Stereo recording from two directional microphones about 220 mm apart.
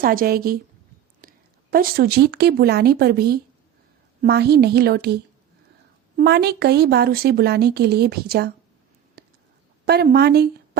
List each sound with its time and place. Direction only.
0.0 s a woman's voice: 40° right (ahead or behind)
1.7 s a woman's voice: 45° right (ahead or behind)
6.1 s a woman's voice: 50° right (ahead or behind)
9.2 s a sound: 45° right (ahead or behind)
9.8 s a woman's voice: 45° right (ahead or behind)